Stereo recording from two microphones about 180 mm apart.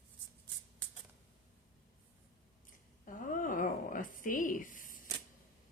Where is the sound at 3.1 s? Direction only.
50° left (ahead or behind).